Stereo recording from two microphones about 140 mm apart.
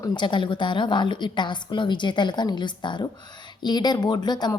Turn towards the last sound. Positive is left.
turn(degrees=30)  # may be behind; listen again after turning